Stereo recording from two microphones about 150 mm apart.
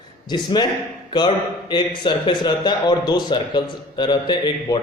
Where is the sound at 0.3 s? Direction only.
30° left (ahead or behind).